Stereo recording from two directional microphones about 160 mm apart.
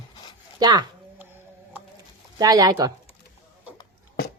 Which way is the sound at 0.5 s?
25° right (ahead or behind).